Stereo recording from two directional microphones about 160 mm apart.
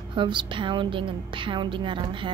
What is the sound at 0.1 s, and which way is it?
Speech, 30° right (ahead or behind).